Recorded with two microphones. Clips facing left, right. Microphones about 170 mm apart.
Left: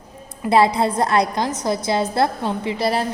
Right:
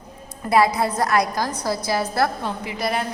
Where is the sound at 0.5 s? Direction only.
25° left (ahead or behind).